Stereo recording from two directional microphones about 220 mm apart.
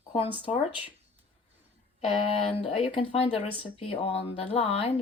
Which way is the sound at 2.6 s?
25° left (ahead or behind).